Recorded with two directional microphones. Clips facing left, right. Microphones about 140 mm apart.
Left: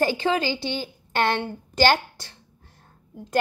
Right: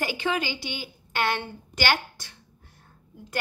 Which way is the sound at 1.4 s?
35° left (ahead or behind).